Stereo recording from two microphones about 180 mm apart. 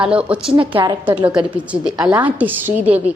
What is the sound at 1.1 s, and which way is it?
A woman's voice, 10° right (ahead or behind).